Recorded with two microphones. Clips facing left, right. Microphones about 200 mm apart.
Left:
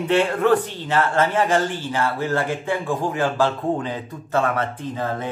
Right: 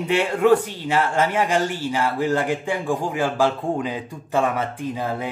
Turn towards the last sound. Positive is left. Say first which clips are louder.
# even
turn(degrees=-10)  # may be behind; listen again after turning